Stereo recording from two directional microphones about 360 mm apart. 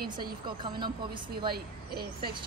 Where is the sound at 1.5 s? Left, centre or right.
Right.